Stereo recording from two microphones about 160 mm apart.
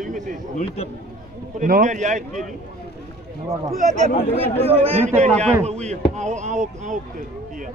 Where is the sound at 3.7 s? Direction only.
45° right (ahead or behind).